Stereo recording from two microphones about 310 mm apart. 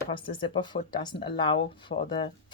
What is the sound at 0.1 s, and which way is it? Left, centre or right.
Speech, centre.